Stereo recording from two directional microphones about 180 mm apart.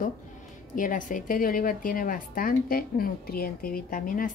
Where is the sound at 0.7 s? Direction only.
50° left (ahead or behind).